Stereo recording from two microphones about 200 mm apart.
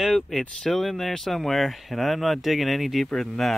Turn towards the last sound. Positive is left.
turn(degrees=0)  # may be behind; listen again after turning